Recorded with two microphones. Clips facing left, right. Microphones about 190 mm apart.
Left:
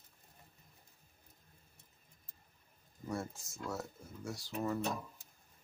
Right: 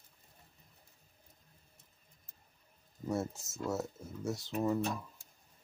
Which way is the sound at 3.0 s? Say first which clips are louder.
Right 5 dB; 20° right (ahead or behind).